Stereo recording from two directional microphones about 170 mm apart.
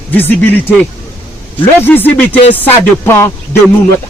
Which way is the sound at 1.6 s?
10° left (ahead or behind).